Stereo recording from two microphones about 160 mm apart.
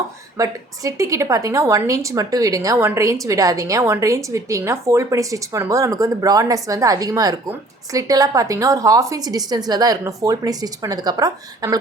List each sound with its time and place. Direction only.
0.3 s a woman's voice: 20° right (ahead or behind)